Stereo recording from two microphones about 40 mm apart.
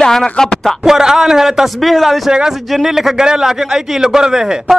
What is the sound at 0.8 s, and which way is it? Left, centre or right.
Speech, centre.